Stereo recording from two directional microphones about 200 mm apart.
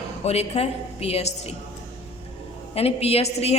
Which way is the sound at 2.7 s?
30° left (ahead or behind).